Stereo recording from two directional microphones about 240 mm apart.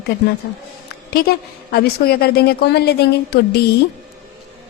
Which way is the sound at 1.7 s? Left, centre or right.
Left.